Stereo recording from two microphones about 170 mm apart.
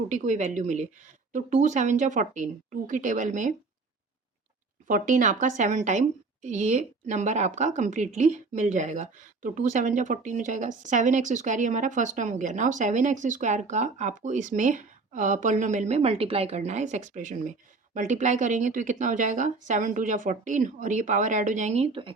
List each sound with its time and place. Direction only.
0.1 s a woman's voice: 45° right (ahead or behind)
4.9 s a woman's voice: 50° right (ahead or behind); by 22.1 s 35° right (ahead or behind)